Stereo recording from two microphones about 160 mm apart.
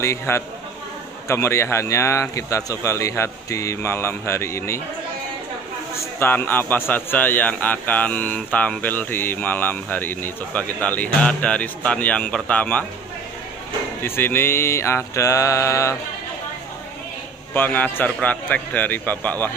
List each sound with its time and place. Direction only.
0.0 s speech: 15° left (ahead or behind)
6.1 s speech: 10° left (ahead or behind)
14.0 s speech: 15° left (ahead or behind)
17.6 s speech: 10° left (ahead or behind)